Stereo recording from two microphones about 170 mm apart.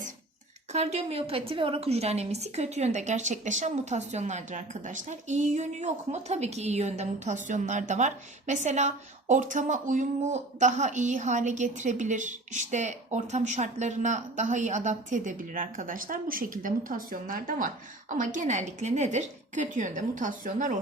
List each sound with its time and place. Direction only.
0.7 s a woman's voice: 40° right (ahead or behind)